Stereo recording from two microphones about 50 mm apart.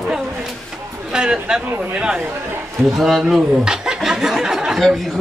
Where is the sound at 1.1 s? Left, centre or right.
Centre.